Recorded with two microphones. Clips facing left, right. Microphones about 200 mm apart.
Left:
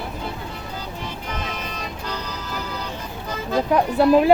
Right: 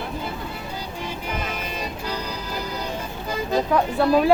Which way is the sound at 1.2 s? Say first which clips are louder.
Right 1 dB; 10° right (ahead or behind).